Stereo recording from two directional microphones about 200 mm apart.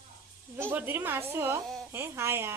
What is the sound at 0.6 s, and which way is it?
A woman's voice, 10° right (ahead or behind).